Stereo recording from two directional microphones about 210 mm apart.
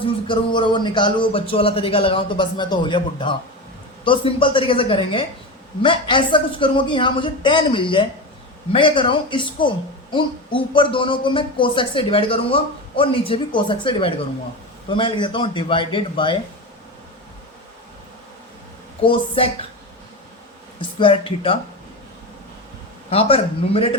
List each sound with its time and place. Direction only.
0.0 s speech: 25° left (ahead or behind)
19.0 s speech: 25° left (ahead or behind)
20.7 s speech: 25° left (ahead or behind)
23.0 s speech: 25° left (ahead or behind)